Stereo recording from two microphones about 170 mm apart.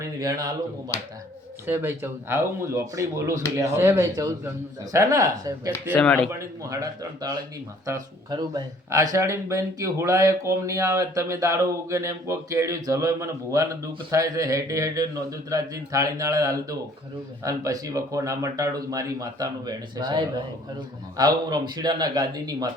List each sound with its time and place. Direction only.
0.0 s speech: 20° right (ahead or behind)
1.6 s a man's voice: 15° right (ahead or behind)
5.9 s speech: 10° left (ahead or behind)
6.6 s a man's voice: 20° right (ahead or behind)